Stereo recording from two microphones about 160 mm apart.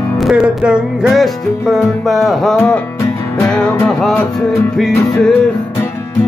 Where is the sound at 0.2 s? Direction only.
5° right (ahead or behind).